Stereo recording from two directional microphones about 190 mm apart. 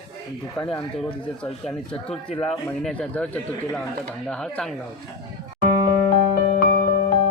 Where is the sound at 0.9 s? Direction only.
5° left (ahead or behind).